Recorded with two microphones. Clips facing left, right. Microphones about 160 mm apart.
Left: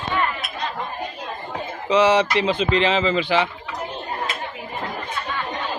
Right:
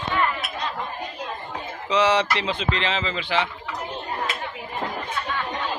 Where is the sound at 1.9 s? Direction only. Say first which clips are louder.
Left 4 dB; 10° left (ahead or behind).